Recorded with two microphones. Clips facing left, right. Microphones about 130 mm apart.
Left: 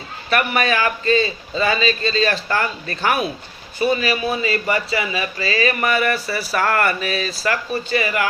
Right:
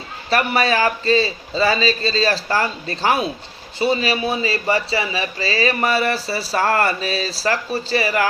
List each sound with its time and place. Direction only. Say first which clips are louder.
0.3 s a man's voice: right 1 dB; 30° right (ahead or behind)